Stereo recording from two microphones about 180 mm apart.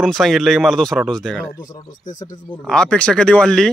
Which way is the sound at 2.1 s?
20° left (ahead or behind).